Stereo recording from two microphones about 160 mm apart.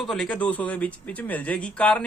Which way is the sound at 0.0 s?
Centre (ahead or behind).